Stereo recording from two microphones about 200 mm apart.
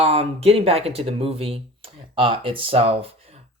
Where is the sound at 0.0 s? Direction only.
30° right (ahead or behind).